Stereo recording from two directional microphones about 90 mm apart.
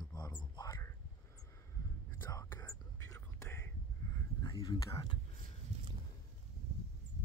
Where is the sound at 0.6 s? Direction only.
45° left (ahead or behind).